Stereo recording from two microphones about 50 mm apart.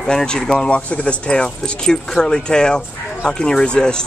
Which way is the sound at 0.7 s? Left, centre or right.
Left.